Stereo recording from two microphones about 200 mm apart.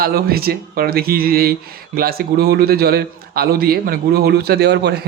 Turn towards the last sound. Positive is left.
turn(degrees=-55)  # may be behind; listen again after turning